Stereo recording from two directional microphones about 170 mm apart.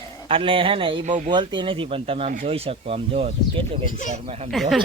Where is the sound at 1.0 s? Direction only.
45° right (ahead or behind).